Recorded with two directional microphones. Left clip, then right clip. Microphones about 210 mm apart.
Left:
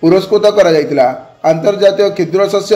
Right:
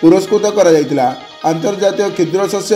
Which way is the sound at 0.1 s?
35° right (ahead or behind).